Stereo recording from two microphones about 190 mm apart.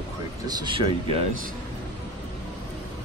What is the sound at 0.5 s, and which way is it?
Speech, 25° right (ahead or behind).